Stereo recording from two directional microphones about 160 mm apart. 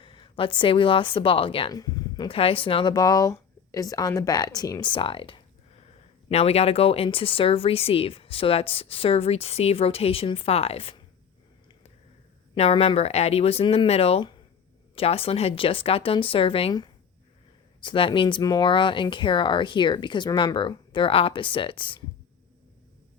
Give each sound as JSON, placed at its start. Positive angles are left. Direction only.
{"t": 0.0, "sound": "a woman's voice", "side_deg": 30}
{"t": 12.5, "sound": "speech", "side_deg": 40}